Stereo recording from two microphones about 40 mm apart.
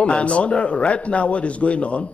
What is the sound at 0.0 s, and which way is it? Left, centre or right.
Speech, left.